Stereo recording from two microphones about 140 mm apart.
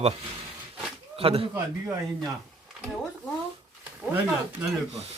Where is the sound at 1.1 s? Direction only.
40° right (ahead or behind).